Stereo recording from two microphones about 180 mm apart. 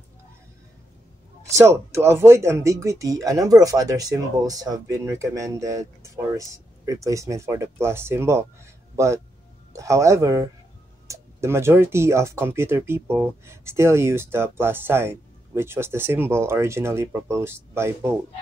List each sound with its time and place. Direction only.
1.6 s a man's voice: 15° right (ahead or behind)